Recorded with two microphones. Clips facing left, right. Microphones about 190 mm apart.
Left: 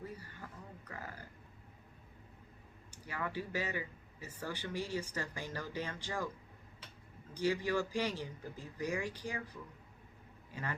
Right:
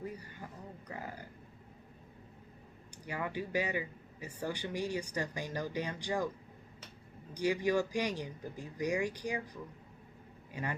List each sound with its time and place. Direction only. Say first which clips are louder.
0.9 s a sound: right 4 dB; 15° right (ahead or behind)
2.9 s speech: right 2 dB; 15° right (ahead or behind)
7.3 s speech: right 3 dB; 15° right (ahead or behind)
10.5 s speech: right 3 dB; 15° right (ahead or behind)